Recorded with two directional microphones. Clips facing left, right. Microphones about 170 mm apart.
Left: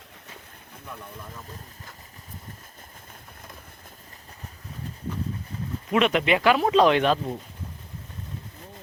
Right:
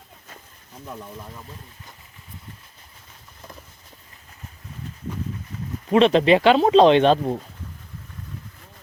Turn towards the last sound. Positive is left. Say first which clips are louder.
# right 5 dB
turn(degrees=-30)  # may be behind; listen again after turning